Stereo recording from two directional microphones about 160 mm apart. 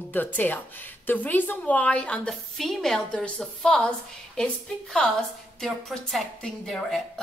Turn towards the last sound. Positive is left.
turn(degrees=0)  # may be behind; listen again after turning